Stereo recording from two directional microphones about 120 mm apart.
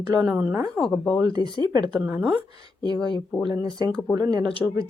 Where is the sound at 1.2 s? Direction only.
35° right (ahead or behind).